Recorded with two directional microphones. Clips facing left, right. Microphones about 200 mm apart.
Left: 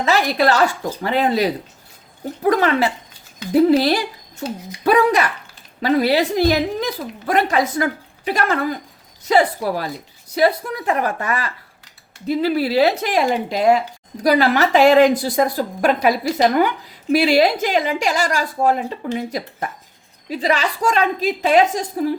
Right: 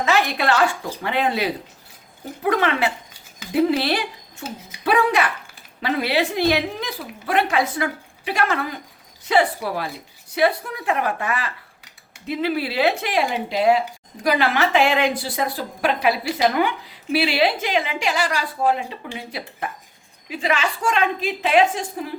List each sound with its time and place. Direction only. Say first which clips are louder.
0.0 s a woman's voice: left 3 dB; 35° left (ahead or behind)